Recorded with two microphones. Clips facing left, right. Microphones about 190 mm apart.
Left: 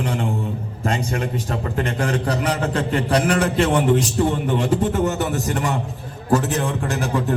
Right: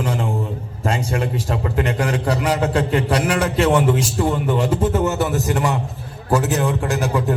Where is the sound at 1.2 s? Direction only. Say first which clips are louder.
Right 2 dB; 40° left (ahead or behind).